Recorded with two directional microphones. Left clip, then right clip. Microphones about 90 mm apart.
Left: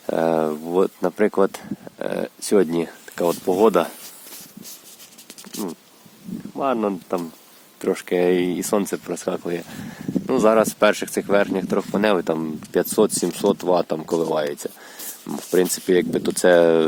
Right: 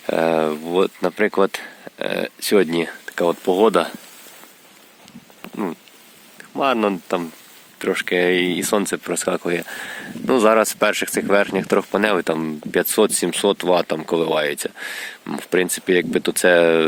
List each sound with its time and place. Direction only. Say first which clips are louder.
0.1 s speech: right 2 dB; 15° left (ahead or behind)
0.7 s speech: right 1 dB; 25° left (ahead or behind)
2.6 s speech: right 1 dB; 20° left (ahead or behind)
6.6 s speech: right 4 dB; 10° right (ahead or behind)
7.8 s speech: right 2 dB; 35° left (ahead or behind); by 9.0 s 20° left (ahead or behind)
9.0 s speech: right 4 dB; 5° right (ahead or behind)
10.2 s speech: right 2 dB; 10° left (ahead or behind)
10.5 s speech: even; centre (ahead or behind)
11.9 s speech: right 1 dB; 10° left (ahead or behind)
12.9 s speech: right 2 dB; 20° left (ahead or behind)
14.6 s speech: right 6 dB; 15° right (ahead or behind)
15.3 s speech: even; 20° left (ahead or behind)